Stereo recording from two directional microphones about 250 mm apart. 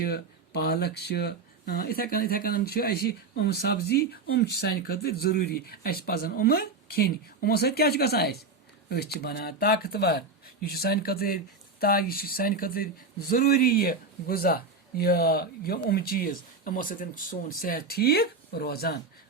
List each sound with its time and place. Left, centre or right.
0.0 s speech: left